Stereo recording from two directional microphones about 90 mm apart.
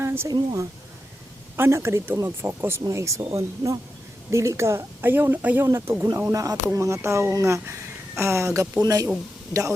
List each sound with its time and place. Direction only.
0.0 s a sound: 30° right (ahead or behind)
0.3 s speech: 40° right (ahead or behind)
1.5 s speech: 30° right (ahead or behind)
5.6 s speech: 35° right (ahead or behind)